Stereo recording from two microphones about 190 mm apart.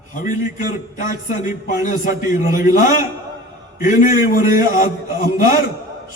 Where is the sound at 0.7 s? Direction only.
40° left (ahead or behind).